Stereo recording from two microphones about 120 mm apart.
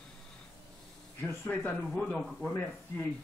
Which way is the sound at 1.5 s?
15° left (ahead or behind).